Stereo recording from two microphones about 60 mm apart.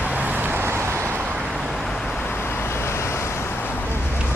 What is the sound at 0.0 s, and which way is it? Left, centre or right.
Vehicle, right.